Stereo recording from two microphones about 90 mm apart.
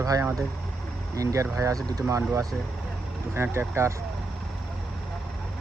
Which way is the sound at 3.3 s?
30° right (ahead or behind).